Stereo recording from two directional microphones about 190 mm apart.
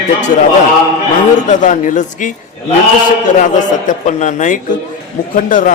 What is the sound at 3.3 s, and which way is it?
A man's voice, 40° left (ahead or behind).